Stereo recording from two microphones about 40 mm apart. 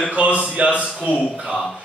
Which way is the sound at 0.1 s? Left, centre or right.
Right.